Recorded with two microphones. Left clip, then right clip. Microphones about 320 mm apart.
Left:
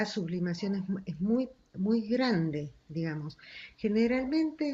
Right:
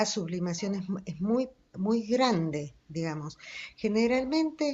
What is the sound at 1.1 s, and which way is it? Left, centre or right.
Speech, right.